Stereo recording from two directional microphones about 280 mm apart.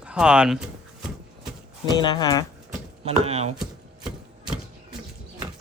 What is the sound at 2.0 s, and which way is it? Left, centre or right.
Speech, centre.